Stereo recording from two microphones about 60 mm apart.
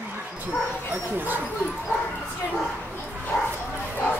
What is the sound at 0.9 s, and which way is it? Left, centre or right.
Speech, right.